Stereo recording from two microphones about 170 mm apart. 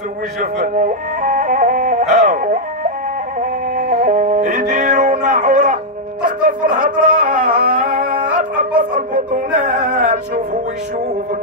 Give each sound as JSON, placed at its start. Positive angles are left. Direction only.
{"t": 0.4, "sound": "music", "side_deg": -50}